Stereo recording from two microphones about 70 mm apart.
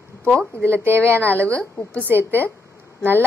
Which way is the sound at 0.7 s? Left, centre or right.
Right.